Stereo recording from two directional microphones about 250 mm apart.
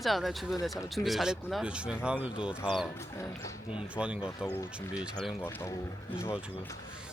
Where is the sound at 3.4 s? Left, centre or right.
Left.